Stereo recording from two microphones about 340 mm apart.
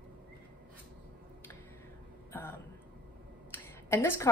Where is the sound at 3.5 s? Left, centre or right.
Centre.